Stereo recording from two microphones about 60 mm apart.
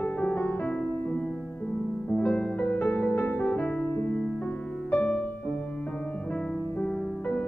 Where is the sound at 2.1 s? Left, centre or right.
Centre.